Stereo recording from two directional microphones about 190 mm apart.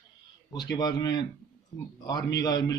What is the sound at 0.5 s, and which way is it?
Speech, 20° left (ahead or behind).